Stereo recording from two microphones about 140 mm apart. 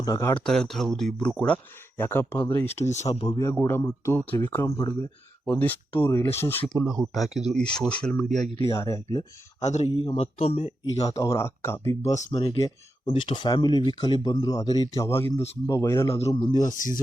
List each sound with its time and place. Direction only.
0.0 s speech: 25° left (ahead or behind)
0.3 s speech: 5° left (ahead or behind); by 2.8 s 20° left (ahead or behind)
2.8 s speech: 55° left (ahead or behind)
3.2 s speech: 30° left (ahead or behind)
3.4 s speech: 20° left (ahead or behind)
6.8 s speech: centre (ahead or behind)
8.7 s speech: 20° left (ahead or behind)
9.6 s speech: 55° left (ahead or behind)
9.9 s speech: 35° left (ahead or behind)
10.9 s speech: 25° left (ahead or behind)
12.1 s speech: 55° left (ahead or behind)
12.4 s speech: 25° left (ahead or behind)
16.6 s speech: 70° left (ahead or behind)